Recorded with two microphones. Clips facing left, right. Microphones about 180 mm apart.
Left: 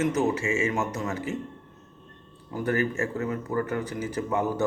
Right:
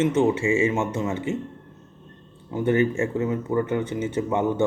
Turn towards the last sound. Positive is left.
turn(degrees=-25)  # may be behind; listen again after turning